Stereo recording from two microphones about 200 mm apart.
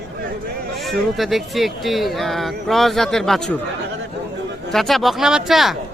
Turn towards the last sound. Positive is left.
turn(degrees=0)  # may be behind; listen again after turning